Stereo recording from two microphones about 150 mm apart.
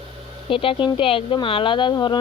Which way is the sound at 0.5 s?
35° left (ahead or behind).